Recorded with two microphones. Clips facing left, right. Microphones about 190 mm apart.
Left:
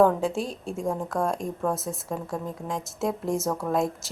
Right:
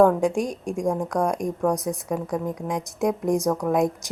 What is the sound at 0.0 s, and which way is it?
Speech, 15° right (ahead or behind).